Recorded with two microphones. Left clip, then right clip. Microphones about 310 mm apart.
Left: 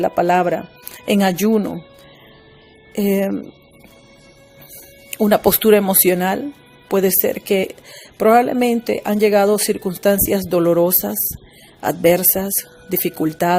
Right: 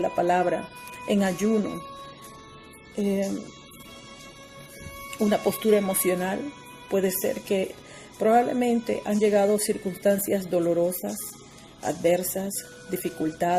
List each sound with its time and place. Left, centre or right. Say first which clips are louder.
0.0 s speech: left 7 dB; left
2.9 s speech: left 9 dB; left
5.1 s speech: left 10 dB; left